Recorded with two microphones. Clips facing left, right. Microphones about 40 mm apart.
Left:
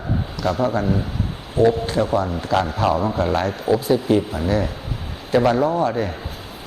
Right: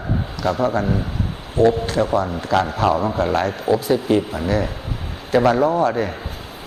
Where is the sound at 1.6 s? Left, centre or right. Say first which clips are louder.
Right 1 dB; right.